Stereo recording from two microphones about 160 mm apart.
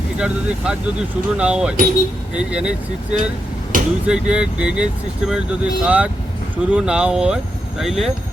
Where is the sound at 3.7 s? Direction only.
55° right (ahead or behind).